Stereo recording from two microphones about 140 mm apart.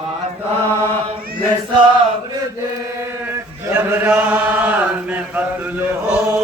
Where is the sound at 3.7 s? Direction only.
15° right (ahead or behind).